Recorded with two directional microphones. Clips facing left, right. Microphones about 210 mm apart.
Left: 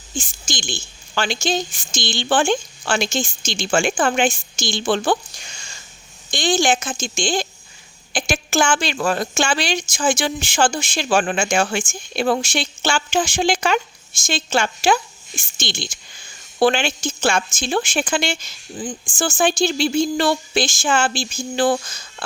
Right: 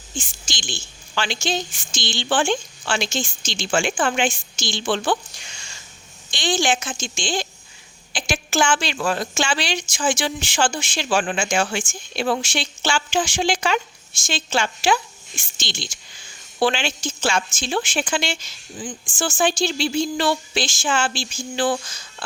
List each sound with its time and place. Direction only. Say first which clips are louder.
0.2 s a woman's voice: left 4 dB; 45° left (ahead or behind)